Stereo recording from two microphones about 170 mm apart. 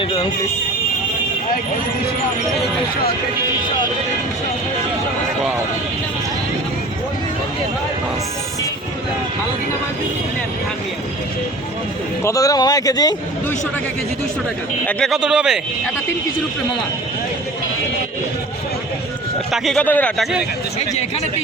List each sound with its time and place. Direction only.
0.0 s speech: 30° left (ahead or behind)
12.2 s speech: 20° left (ahead or behind)
14.8 s a man's voice: 5° left (ahead or behind)
19.5 s a man's voice: centre (ahead or behind)